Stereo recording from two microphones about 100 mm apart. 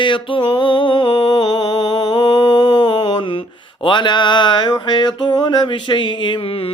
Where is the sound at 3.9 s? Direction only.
50° left (ahead or behind).